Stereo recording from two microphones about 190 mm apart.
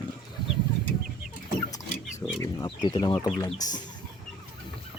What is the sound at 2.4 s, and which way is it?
Speech, 20° left (ahead or behind).